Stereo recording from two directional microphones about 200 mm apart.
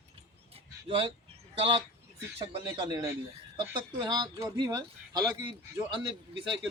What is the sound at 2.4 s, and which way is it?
Speech, 25° right (ahead or behind).